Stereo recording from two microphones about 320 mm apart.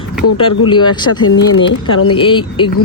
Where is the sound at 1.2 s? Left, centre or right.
Left.